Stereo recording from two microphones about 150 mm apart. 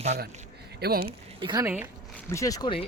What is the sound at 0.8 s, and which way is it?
Speech, 90° right.